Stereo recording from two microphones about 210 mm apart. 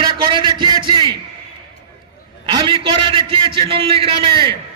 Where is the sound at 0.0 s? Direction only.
20° right (ahead or behind).